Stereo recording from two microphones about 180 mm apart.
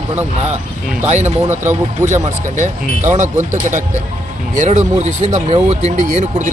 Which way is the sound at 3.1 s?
40° right (ahead or behind).